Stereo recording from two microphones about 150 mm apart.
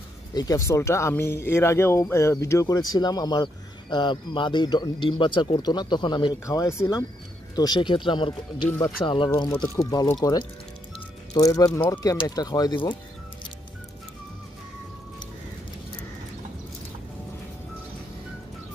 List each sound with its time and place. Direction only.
0.3 s speech: 25° left (ahead or behind)
8.6 s speech: 15° left (ahead or behind)
9.0 s speech: 30° left (ahead or behind)
11.3 s speech: 25° left (ahead or behind)